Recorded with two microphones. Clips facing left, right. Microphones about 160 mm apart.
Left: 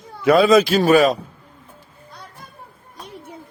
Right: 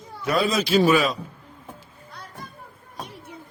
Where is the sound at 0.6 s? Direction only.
45° left (ahead or behind).